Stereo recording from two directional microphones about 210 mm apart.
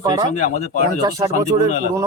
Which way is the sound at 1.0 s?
15° right (ahead or behind).